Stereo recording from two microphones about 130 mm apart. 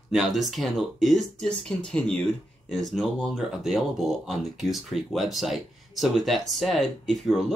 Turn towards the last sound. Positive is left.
turn(degrees=0)  # may be behind; listen again after turning